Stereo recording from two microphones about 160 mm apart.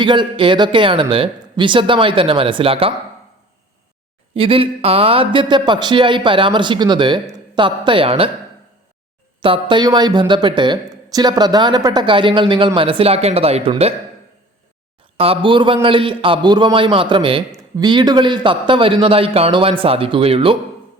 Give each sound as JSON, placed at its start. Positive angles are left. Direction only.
{"t": 0.0, "sound": "a man's voice", "side_deg": -30}
{"t": 4.4, "sound": "a man's voice", "side_deg": -35}
{"t": 9.4, "sound": "speech", "side_deg": -30}
{"t": 15.2, "sound": "a man's voice", "side_deg": -35}